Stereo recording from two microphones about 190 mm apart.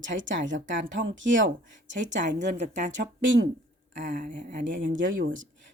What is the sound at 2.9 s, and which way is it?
Speech, 75° right (ahead or behind).